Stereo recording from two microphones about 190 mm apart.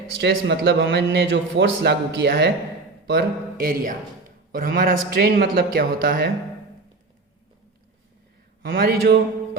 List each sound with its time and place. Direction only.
0.2 s a man's voice: 60° right (ahead or behind)
8.6 s speech: 50° right (ahead or behind)